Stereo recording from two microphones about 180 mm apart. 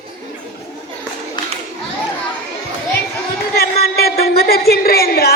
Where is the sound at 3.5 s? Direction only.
60° left (ahead or behind).